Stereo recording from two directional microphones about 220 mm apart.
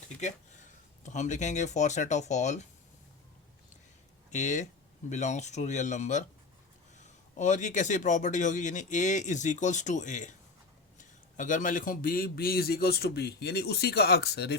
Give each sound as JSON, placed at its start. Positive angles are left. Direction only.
{"t": 1.0, "sound": "speech", "side_deg": 35}
{"t": 4.3, "sound": "speech", "side_deg": 30}
{"t": 7.3, "sound": "a man's voice", "side_deg": 35}